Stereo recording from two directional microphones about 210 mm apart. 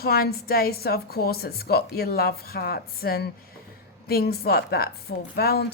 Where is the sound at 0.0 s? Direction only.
45° left (ahead or behind).